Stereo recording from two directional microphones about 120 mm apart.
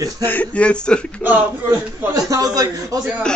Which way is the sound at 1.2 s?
15° right (ahead or behind).